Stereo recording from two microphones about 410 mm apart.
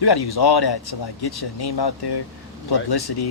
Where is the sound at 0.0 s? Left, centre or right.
Left.